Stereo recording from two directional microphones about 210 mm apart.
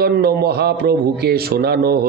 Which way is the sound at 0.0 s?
50° right (ahead or behind).